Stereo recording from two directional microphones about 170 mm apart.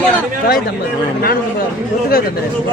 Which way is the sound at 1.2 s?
65° left (ahead or behind).